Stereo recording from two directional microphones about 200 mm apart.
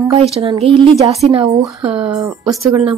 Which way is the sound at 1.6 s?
5° right (ahead or behind).